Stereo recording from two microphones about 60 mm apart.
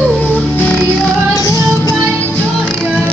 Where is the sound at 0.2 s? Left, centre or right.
Left.